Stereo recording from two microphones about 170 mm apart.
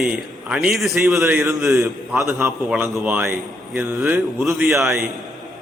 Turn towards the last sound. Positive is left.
turn(degrees=0)  # may be behind; listen again after turning